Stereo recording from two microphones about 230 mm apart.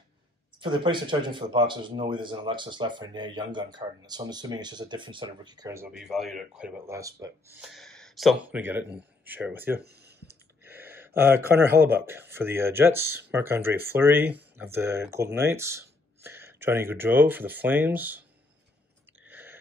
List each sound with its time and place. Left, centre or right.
0.6 s speech: right; by 7.0 s centre
7.0 s speech: centre
7.5 s speech: centre
9.8 s a sound: right
10.6 s speech: centre
19.2 s a sound: centre